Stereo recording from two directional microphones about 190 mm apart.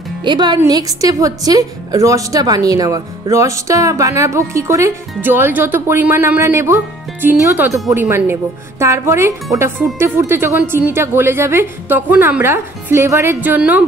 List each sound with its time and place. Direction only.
0.2 s a woman's voice: 25° right (ahead or behind)